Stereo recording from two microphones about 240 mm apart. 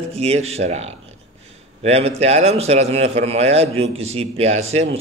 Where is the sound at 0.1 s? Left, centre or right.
Right.